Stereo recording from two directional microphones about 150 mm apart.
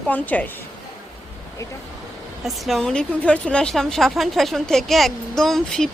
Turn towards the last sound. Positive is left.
turn(degrees=5)  # may be behind; listen again after turning